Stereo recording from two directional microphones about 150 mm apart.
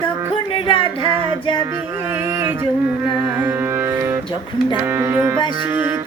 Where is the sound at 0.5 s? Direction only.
35° left (ahead or behind).